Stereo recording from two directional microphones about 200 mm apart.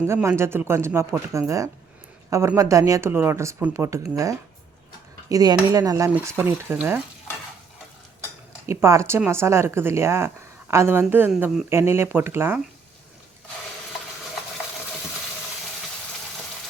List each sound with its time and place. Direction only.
0.1 s a woman's voice: 15° right (ahead or behind)
8.6 s a woman's voice: 15° right (ahead or behind)